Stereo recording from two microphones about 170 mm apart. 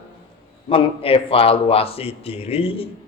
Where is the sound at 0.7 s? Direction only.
35° left (ahead or behind).